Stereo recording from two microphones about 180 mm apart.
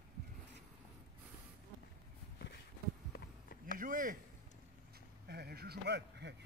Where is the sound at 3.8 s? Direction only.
50° right (ahead or behind).